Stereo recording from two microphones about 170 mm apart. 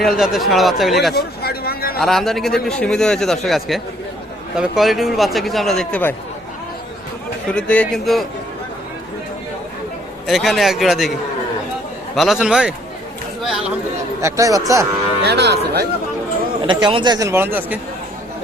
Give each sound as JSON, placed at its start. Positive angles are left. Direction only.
{"t": 0.0, "sound": "a man's voice", "side_deg": 0}
{"t": 1.1, "sound": "speech", "side_deg": 65}
{"t": 2.0, "sound": "a man's voice", "side_deg": 0}
{"t": 7.5, "sound": "a man's voice", "side_deg": 5}
{"t": 10.2, "sound": "a man's voice", "side_deg": 0}
{"t": 12.1, "sound": "a man's voice", "side_deg": 0}
{"t": 14.2, "sound": "speech", "side_deg": -20}
{"t": 15.2, "sound": "speech", "side_deg": -80}
{"t": 16.6, "sound": "speech", "side_deg": -30}